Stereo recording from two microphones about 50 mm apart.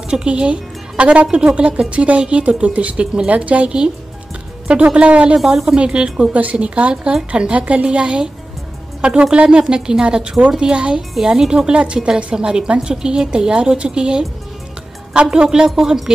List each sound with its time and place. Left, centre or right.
0.1 s speech: centre
5.4 s a woman's voice: centre
5.8 s a woman's voice: centre
11.0 s a woman's voice: centre
15.4 s a woman's voice: centre